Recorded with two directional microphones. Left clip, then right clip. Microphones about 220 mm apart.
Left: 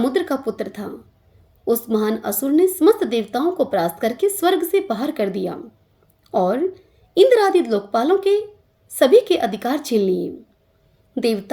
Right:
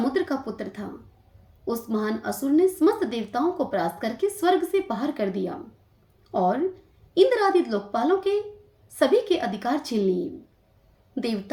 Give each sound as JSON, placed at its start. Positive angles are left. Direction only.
{"t": 0.0, "sound": "a woman's voice", "side_deg": 40}